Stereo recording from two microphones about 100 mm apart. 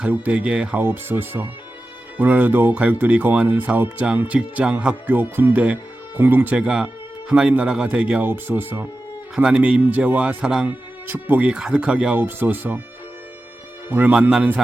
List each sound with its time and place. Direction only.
0.0 s speech: 10° right (ahead or behind)
0.8 s speech: 20° right (ahead or behind)
8.3 s speech: 20° right (ahead or behind)
11.0 s speech: 20° right (ahead or behind)
13.9 s speech: 15° right (ahead or behind)